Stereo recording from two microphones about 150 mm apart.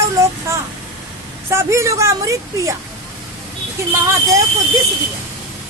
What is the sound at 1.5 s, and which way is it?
Speech, 20° right (ahead or behind).